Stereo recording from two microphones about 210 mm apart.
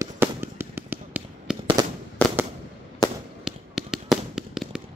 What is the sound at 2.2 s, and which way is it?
Fireworks, 10° left (ahead or behind).